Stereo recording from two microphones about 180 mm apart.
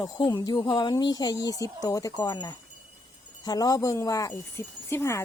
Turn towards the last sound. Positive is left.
turn(degrees=15)  # may be behind; listen again after turning